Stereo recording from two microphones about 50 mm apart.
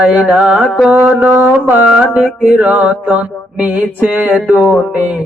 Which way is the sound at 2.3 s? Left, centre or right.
Right.